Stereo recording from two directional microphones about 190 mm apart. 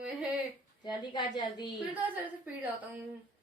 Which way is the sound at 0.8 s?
25° left (ahead or behind).